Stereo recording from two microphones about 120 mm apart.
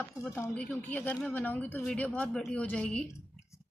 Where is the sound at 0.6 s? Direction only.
10° left (ahead or behind).